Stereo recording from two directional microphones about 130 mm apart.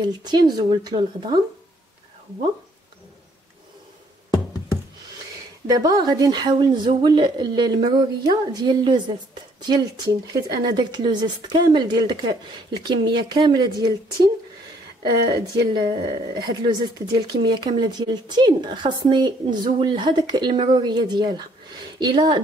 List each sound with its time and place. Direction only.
0.0 s speech: 35° right (ahead or behind)
5.7 s speech: 30° right (ahead or behind)